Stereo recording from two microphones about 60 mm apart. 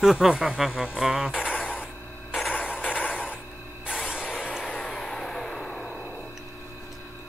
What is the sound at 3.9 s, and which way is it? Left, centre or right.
Spray, centre.